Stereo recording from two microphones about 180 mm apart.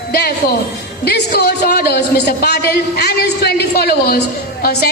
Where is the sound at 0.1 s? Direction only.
60° left (ahead or behind).